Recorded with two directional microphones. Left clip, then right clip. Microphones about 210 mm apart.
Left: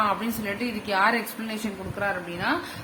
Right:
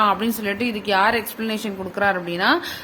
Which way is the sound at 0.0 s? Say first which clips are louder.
Right 6 dB; 35° right (ahead or behind).